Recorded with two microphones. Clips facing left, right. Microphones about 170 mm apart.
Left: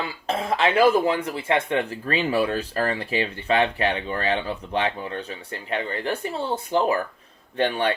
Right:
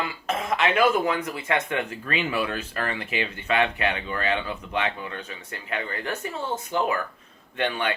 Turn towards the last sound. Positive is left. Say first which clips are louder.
# left 4 dB
turn(degrees=35)  # may be behind; listen again after turning